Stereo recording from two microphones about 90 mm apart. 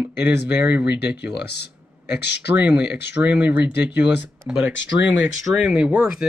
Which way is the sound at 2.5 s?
15° right (ahead or behind).